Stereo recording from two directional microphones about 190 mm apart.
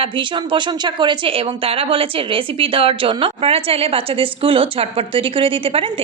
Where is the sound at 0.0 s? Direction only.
25° right (ahead or behind).